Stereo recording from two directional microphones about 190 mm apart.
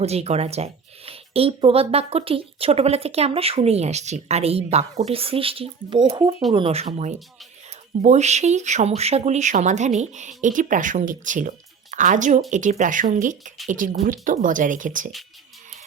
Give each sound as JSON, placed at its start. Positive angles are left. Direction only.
{"t": 0.0, "sound": "speech", "side_deg": -35}